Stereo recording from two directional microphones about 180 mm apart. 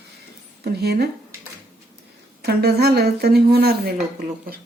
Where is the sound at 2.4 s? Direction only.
60° right (ahead or behind).